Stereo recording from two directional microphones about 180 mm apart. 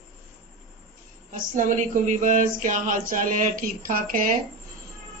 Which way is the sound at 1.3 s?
45° right (ahead or behind).